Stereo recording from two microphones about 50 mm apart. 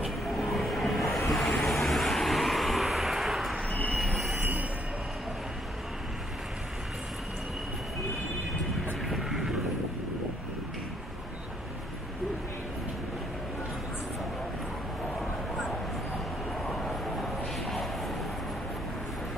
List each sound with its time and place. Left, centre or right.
0.0 s vehicle: centre
4.0 s train: centre
4.4 s train wheels squealing: right
9.1 s vehicle: centre